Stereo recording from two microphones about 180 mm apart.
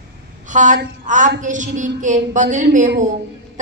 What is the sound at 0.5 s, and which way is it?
A woman's voice, 45° right (ahead or behind).